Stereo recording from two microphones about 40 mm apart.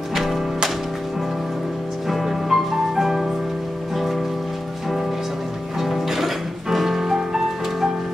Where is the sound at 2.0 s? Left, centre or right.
Centre.